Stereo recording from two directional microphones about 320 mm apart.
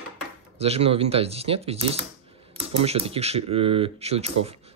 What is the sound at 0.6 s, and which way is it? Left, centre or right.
Speech, centre.